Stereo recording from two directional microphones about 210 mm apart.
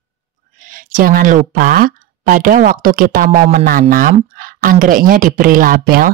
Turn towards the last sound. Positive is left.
turn(degrees=-45)  # may be behind; listen again after turning